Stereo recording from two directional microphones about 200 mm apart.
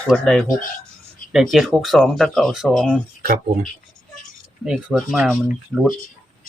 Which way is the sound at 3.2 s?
45° right (ahead or behind).